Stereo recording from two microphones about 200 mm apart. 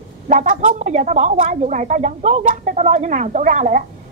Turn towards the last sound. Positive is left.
turn(degrees=-40)  # may be behind; listen again after turning